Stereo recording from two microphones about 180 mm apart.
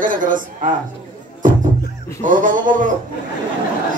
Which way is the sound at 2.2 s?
45° right (ahead or behind).